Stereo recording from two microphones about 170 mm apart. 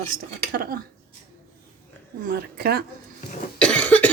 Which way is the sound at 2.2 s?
65° right (ahead or behind).